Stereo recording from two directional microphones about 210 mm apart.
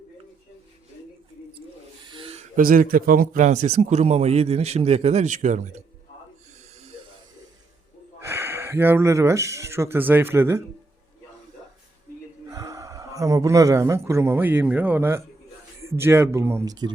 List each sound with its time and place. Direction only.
2.1 s a sound: 25° right (ahead or behind)
2.6 s a man's voice: 40° right (ahead or behind)
8.2 s speech: 10° right (ahead or behind)
12.5 s speech: 15° right (ahead or behind)